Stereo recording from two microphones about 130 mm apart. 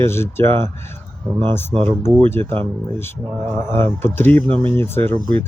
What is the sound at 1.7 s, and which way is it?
Speech, 45° right (ahead or behind).